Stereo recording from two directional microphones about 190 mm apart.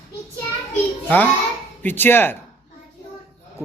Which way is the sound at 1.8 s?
10° left (ahead or behind).